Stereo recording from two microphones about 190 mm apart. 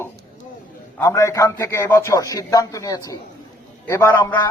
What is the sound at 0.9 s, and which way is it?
A man's voice, 15° left (ahead or behind).